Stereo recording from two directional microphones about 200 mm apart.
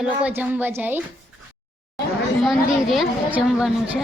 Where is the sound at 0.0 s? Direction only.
5° right (ahead or behind).